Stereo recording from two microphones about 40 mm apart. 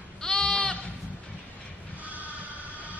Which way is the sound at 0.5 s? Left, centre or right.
Centre.